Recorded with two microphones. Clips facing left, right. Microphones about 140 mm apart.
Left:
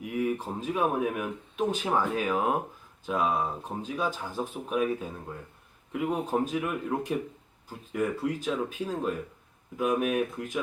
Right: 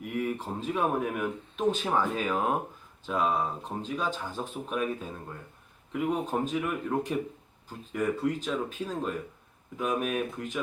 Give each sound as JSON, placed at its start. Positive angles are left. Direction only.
{"t": 0.0, "sound": "speech", "side_deg": 5}